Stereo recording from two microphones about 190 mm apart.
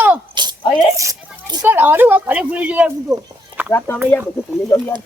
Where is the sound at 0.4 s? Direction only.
25° right (ahead or behind).